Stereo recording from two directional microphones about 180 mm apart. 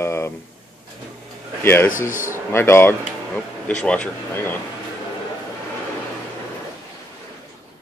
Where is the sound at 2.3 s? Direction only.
15° left (ahead or behind).